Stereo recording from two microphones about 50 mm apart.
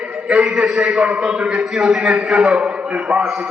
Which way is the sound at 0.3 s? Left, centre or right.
Centre.